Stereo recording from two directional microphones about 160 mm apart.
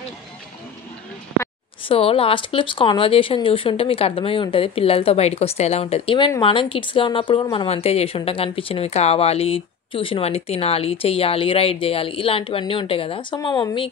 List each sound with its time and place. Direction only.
1.9 s a woman's voice: 35° left (ahead or behind)